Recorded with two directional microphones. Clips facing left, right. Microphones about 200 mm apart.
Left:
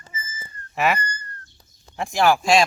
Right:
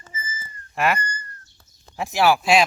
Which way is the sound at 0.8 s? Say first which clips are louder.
Even; centre (ahead or behind).